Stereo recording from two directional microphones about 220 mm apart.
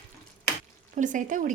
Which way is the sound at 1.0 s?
35° right (ahead or behind).